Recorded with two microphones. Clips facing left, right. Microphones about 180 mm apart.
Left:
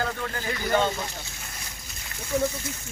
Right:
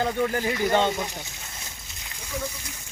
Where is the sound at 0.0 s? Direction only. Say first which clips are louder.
Right 6 dB; 20° right (ahead or behind).